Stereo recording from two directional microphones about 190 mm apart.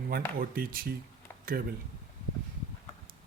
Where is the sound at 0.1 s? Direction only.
50° right (ahead or behind).